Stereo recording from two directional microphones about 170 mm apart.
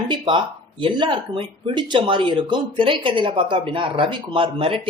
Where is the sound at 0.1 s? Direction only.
30° right (ahead or behind).